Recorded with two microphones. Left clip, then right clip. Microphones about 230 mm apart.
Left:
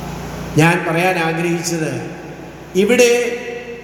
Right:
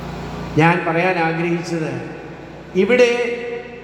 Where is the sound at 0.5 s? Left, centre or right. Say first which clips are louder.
Left 1 dB; left.